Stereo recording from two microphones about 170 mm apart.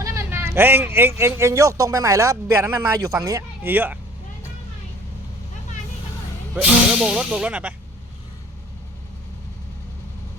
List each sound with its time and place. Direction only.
0.0 s speech: 20° right (ahead or behind)
6.5 s speech: 5° right (ahead or behind)